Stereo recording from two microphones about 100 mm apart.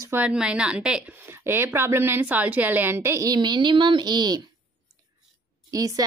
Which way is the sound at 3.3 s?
50° right (ahead or behind).